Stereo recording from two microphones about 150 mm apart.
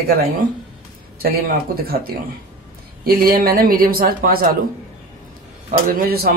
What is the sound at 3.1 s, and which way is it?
Speech, 80° right.